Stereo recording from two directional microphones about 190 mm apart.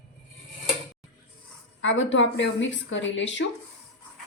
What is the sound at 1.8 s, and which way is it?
A woman's voice, 80° left.